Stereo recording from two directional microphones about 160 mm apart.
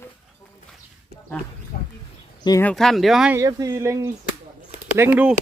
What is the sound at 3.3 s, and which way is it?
Speech, 20° right (ahead or behind).